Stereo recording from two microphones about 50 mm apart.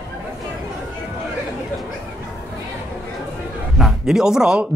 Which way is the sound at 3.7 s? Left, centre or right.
Centre.